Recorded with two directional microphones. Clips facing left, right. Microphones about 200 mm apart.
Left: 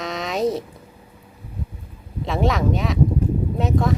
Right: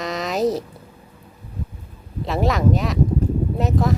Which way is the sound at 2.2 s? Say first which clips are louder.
Right 1 dB; centre (ahead or behind).